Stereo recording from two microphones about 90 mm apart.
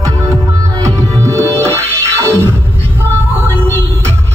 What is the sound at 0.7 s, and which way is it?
Music, 40° right (ahead or behind).